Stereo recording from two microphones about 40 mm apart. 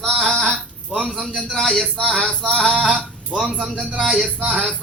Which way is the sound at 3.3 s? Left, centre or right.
Centre.